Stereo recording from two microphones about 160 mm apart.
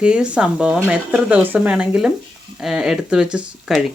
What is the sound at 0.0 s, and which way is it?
Speech, 5° right (ahead or behind).